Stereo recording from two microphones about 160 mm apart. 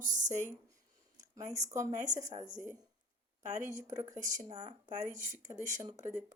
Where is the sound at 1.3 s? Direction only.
20° right (ahead or behind).